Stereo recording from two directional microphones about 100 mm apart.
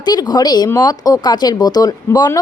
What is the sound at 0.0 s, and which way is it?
Speech, 45° left (ahead or behind).